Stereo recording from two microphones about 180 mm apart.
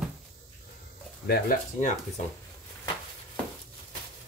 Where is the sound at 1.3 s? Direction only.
50° left (ahead or behind).